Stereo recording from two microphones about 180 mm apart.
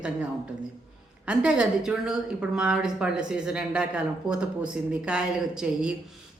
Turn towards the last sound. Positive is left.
turn(degrees=-5)  # may be behind; listen again after turning